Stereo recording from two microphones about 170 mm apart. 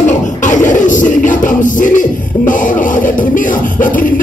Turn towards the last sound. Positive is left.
turn(degrees=55)  # may be behind; listen again after turning